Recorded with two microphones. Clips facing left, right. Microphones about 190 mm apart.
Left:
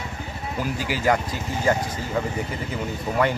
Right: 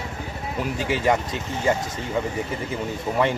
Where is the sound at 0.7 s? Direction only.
25° right (ahead or behind).